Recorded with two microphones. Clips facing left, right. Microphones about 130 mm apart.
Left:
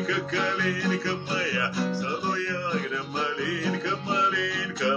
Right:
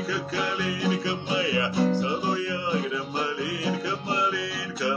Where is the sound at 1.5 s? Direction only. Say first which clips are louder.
Right 5 dB; 20° right (ahead or behind).